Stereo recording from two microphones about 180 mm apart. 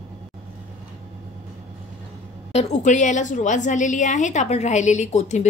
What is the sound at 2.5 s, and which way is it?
A woman's voice, 40° left (ahead or behind).